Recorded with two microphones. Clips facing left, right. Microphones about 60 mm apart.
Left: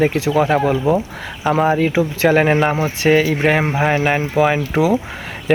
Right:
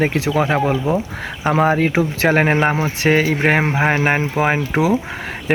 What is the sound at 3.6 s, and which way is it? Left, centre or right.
Speech, right.